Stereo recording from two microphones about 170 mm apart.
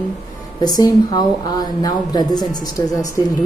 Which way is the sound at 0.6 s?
25° left (ahead or behind).